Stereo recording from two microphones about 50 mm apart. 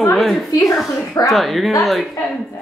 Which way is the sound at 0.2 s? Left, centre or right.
Centre.